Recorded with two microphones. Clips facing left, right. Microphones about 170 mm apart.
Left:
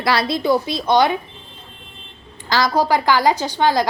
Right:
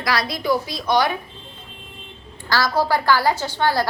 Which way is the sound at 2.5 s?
20° left (ahead or behind).